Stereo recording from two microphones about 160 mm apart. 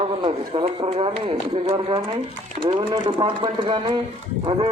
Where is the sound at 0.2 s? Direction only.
35° right (ahead or behind).